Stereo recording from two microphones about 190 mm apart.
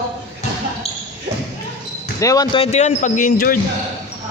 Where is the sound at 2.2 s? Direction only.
20° left (ahead or behind); by 3.6 s 45° left (ahead or behind).